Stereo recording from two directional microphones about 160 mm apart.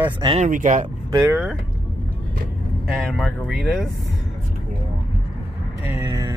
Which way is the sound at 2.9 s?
5° left (ahead or behind).